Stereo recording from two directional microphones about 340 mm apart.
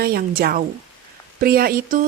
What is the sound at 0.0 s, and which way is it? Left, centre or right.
Speech, right.